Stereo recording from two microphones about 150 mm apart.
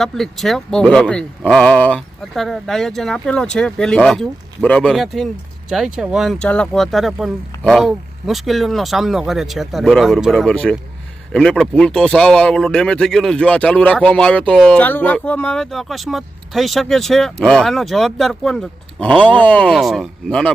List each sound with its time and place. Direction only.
0.0 s speech: centre (ahead or behind)